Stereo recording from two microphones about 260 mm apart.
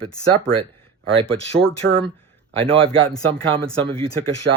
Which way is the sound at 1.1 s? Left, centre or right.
Right.